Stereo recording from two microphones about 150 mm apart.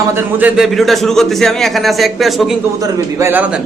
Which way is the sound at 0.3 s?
5° right (ahead or behind).